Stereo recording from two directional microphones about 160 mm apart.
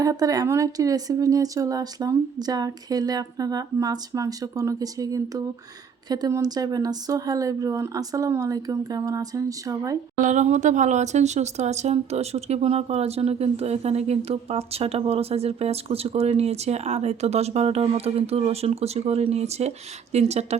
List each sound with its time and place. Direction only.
0.0 s speech: 20° right (ahead or behind)
10.2 s speech: 50° right (ahead or behind)